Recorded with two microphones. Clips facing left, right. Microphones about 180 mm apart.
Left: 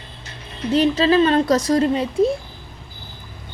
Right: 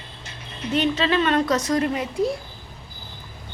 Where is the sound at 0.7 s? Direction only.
35° left (ahead or behind).